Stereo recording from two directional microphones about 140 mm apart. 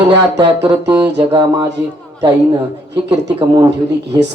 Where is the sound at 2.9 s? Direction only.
35° right (ahead or behind).